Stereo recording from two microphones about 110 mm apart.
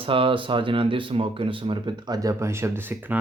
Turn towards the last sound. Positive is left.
turn(degrees=-15)  # may be behind; listen again after turning